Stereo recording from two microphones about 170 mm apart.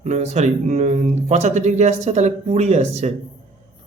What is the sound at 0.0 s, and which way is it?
Speech, 40° right (ahead or behind).